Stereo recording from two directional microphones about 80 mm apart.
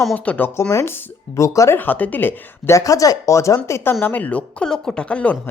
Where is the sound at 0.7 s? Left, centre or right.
Left.